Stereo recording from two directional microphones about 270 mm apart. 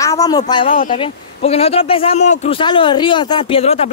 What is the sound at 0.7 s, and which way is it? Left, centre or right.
Speech, left.